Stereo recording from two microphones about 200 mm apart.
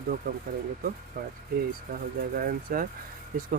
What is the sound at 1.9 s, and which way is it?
Speech, 45° right (ahead or behind).